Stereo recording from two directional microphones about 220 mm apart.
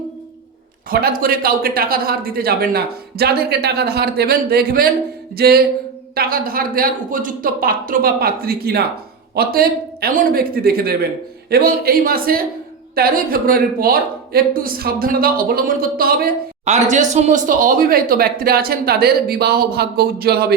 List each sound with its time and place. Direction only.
0.9 s a woman's voice: 40° right (ahead or behind)